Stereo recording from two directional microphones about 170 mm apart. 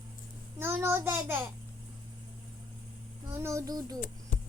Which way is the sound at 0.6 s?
15° right (ahead or behind).